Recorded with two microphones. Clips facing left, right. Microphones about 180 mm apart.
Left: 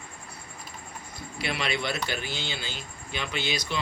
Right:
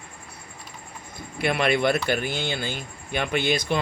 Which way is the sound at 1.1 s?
55° right (ahead or behind).